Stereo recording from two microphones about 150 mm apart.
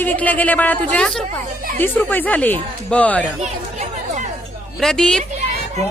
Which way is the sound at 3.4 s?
50° right (ahead or behind).